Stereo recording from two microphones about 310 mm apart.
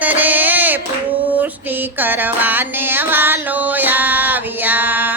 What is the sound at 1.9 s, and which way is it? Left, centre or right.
Music, centre.